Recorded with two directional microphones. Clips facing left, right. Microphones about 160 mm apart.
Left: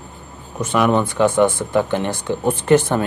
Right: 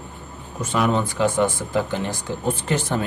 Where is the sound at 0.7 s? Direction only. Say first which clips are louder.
Left 4 dB; 65° left (ahead or behind).